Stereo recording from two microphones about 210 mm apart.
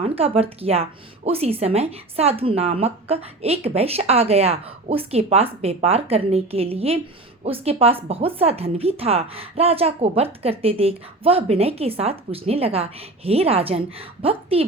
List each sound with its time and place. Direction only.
0.0 s speech: 30° right (ahead or behind)